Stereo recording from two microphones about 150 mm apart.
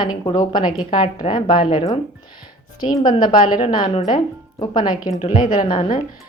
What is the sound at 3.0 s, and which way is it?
A woman's voice, 30° left (ahead or behind).